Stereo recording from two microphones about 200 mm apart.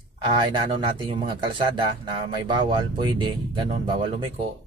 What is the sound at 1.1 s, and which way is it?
Music, 20° right (ahead or behind).